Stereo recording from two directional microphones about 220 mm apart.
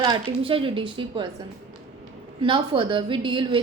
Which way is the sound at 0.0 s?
20° right (ahead or behind).